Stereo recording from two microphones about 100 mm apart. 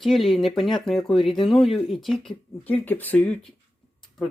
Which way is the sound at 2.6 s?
15° left (ahead or behind).